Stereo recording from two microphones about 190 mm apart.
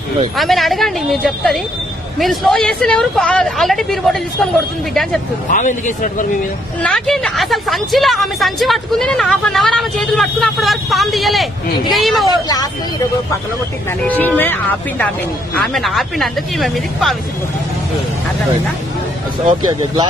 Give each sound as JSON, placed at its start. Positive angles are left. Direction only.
{"t": 0.4, "sound": "a woman's voice", "side_deg": 0}
{"t": 5.5, "sound": "speech", "side_deg": 40}
{"t": 6.8, "sound": "a woman's voice", "side_deg": 5}
{"t": 14.0, "sound": "a woman's voice", "side_deg": 10}